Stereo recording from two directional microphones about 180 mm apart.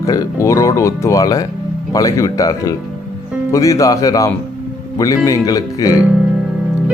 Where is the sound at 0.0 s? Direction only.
20° left (ahead or behind).